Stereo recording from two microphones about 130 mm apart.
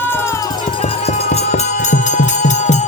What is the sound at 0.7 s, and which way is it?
Music, 50° left (ahead or behind).